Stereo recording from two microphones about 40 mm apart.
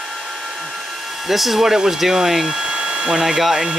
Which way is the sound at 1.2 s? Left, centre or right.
Centre.